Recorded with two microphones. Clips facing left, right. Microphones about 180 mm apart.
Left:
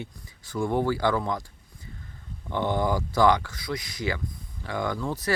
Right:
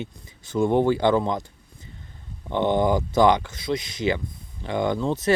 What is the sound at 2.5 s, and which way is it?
Speech, 20° right (ahead or behind).